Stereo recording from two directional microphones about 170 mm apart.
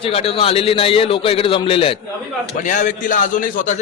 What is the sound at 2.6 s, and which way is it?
A man's voice, 50° left (ahead or behind).